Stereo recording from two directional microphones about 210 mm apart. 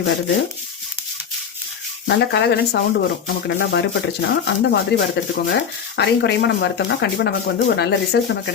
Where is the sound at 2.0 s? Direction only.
55° left (ahead or behind).